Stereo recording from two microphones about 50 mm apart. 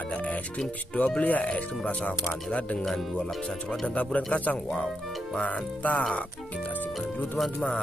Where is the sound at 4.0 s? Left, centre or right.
Left.